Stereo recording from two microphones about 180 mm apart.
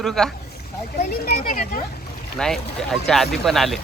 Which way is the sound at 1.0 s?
55° left (ahead or behind).